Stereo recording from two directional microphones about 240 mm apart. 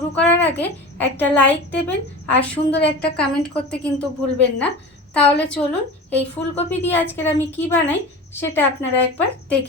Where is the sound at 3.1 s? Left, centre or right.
Centre.